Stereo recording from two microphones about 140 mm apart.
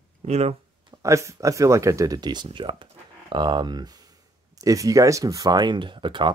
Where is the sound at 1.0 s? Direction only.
20° right (ahead or behind).